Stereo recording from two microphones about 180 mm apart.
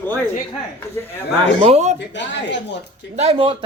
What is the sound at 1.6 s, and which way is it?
Speech, 35° right (ahead or behind).